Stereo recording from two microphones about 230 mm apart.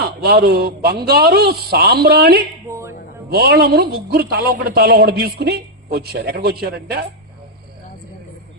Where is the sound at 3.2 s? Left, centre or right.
Right.